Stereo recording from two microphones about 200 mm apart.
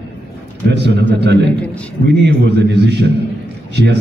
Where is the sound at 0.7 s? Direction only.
60° right (ahead or behind).